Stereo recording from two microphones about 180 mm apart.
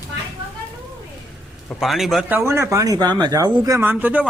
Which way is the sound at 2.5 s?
15° right (ahead or behind).